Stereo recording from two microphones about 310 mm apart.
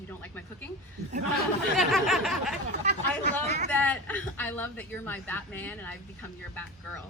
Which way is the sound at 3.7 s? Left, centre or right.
Centre.